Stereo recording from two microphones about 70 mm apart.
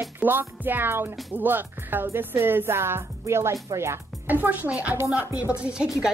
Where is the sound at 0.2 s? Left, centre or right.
Right.